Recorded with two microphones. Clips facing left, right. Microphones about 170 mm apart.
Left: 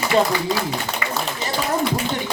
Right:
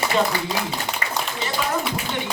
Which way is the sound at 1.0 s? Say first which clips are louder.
Left 3 dB; 40° right (ahead or behind).